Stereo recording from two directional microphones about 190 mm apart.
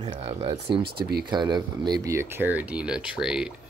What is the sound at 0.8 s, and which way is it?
Speech, 55° right (ahead or behind).